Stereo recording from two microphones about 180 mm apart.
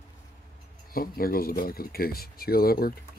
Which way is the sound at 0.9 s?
55° left (ahead or behind).